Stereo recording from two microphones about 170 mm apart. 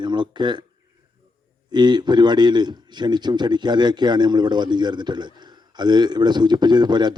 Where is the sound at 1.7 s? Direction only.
25° right (ahead or behind).